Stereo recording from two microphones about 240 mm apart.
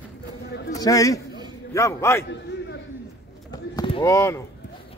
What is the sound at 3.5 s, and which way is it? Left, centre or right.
Basketball bounce, centre.